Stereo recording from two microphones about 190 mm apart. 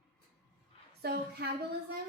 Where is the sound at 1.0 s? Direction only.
55° right (ahead or behind).